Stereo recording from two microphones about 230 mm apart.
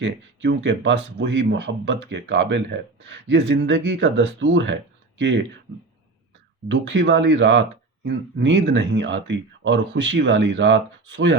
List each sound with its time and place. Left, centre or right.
0.0 s speech: right
6.7 s speech: right